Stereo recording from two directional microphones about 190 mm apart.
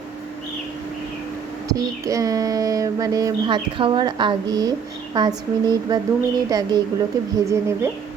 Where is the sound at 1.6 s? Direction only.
15° right (ahead or behind).